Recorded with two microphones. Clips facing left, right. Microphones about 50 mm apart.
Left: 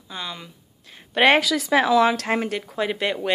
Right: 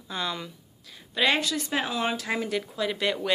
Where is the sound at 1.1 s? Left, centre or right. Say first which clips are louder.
Left 7 dB; left.